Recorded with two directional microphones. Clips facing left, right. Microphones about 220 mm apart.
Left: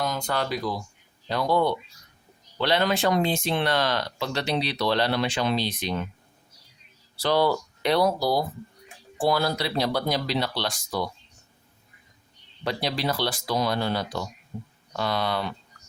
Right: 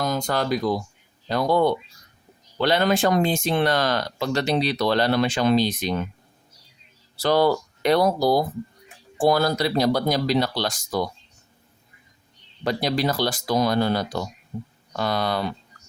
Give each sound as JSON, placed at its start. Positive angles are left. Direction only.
{"t": 0.0, "sound": "speech", "side_deg": -40}
{"t": 7.2, "sound": "speech", "side_deg": -45}
{"t": 12.6, "sound": "speech", "side_deg": -45}